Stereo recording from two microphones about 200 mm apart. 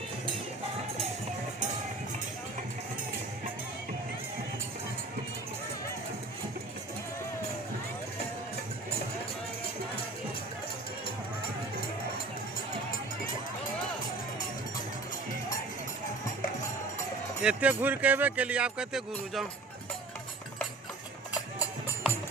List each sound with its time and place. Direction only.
17.4 s speech: 5° right (ahead or behind)